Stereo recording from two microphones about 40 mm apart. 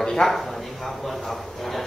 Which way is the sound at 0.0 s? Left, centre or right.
Centre.